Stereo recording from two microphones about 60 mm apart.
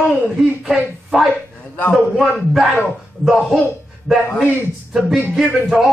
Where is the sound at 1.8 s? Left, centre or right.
Left.